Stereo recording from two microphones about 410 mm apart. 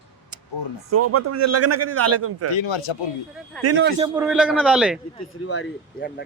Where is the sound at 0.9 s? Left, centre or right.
Right.